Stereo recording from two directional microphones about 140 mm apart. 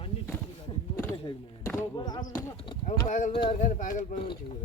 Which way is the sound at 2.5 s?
35° left (ahead or behind).